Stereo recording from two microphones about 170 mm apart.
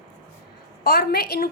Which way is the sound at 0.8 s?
70° left (ahead or behind).